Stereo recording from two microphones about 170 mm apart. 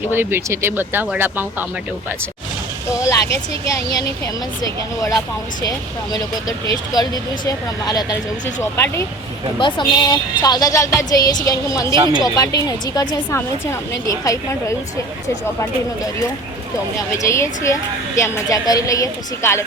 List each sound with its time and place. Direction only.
0.1 s speech: 15° right (ahead or behind)
3.0 s speech: 20° left (ahead or behind)
4.6 s a woman's voice: 20° left (ahead or behind)
8.6 s a woman's voice: 15° left (ahead or behind)
9.6 s a woman's voice: 25° left (ahead or behind)
11.9 s speech: 25° right (ahead or behind)
12.5 s a woman's voice: 20° left (ahead or behind)
17.1 s a woman's voice: 15° left (ahead or behind)